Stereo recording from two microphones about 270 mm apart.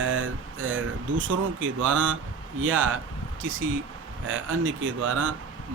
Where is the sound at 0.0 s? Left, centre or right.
Right.